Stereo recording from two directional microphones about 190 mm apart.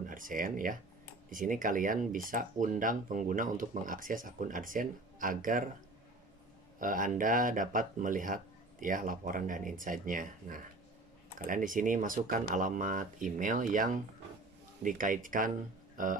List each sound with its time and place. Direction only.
0.0 s speech: 45° right (ahead or behind)
6.8 s speech: 45° right (ahead or behind)